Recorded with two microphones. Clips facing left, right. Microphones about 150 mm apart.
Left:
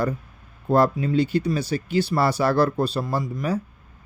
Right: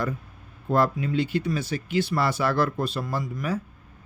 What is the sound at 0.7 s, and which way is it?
Speech, 35° left (ahead or behind).